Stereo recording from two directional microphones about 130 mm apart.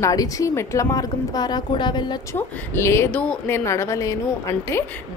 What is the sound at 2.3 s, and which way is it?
A woman's voice, 20° left (ahead or behind).